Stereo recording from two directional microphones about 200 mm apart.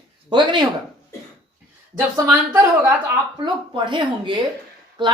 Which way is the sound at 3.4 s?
25° right (ahead or behind).